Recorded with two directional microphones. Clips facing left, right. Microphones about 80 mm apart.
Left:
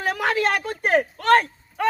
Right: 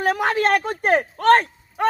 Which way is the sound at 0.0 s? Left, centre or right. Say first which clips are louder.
Right 3 dB; right.